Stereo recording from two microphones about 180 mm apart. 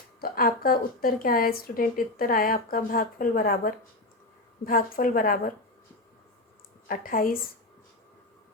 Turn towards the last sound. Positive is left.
turn(degrees=50)  # may be behind; listen again after turning